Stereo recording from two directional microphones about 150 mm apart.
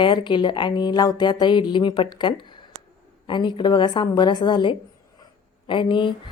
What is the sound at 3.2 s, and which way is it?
A woman's voice, 30° left (ahead or behind).